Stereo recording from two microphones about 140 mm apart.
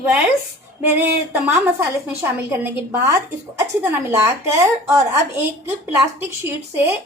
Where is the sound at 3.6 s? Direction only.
20° right (ahead or behind).